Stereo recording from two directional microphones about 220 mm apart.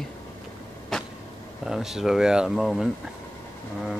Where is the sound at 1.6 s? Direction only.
Centre (ahead or behind).